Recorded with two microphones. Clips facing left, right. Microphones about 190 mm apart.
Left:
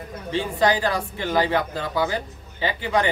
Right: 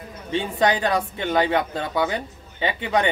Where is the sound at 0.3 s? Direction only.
25° right (ahead or behind).